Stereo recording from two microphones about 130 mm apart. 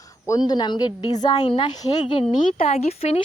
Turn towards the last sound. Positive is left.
turn(degrees=50)  # may be behind; listen again after turning